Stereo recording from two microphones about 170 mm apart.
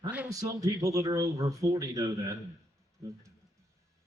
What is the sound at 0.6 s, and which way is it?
Speech, 20° right (ahead or behind).